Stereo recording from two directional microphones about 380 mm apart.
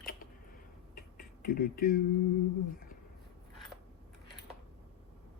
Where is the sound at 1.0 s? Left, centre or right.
Left.